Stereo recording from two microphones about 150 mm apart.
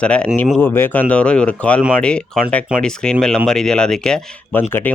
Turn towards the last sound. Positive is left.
turn(degrees=10)  # may be behind; listen again after turning